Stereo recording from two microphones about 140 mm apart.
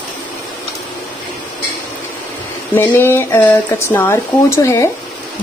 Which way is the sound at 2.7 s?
15° left (ahead or behind).